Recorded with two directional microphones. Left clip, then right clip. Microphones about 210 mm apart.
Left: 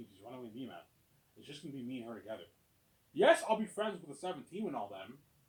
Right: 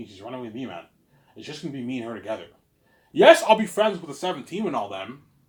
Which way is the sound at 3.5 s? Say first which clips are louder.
Right 16 dB; 25° right (ahead or behind).